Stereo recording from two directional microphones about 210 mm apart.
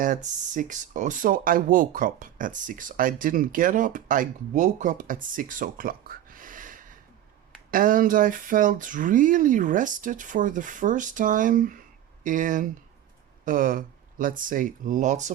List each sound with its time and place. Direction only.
0.0 s speech: 35° right (ahead or behind)